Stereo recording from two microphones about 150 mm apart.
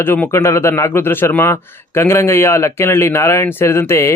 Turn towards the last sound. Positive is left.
turn(degrees=20)  # may be behind; listen again after turning